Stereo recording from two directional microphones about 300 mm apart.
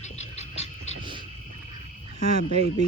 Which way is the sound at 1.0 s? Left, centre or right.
Centre.